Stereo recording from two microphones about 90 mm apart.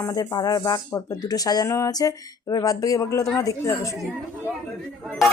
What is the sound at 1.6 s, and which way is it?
Speech, 35° left (ahead or behind).